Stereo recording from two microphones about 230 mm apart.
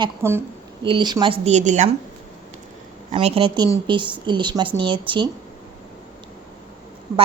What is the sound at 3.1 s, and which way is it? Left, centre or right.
Speech, right.